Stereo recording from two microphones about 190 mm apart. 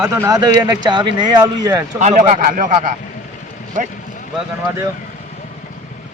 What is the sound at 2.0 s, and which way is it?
Speech, 40° right (ahead or behind).